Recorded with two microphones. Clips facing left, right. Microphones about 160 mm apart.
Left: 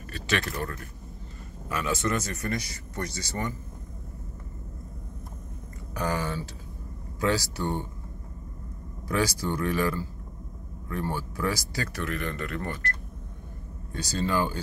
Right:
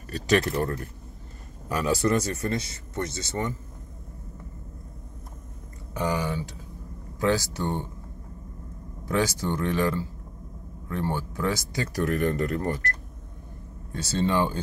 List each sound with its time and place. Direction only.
0.1 s speech: 40° right (ahead or behind); by 3.5 s 25° right (ahead or behind)
5.9 s speech: 20° right (ahead or behind)
9.0 s speech: 20° right (ahead or behind)
11.9 s speech: 40° right (ahead or behind)
13.9 s speech: 25° right (ahead or behind)